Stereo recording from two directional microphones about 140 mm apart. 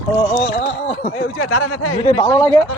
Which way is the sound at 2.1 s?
25° left (ahead or behind).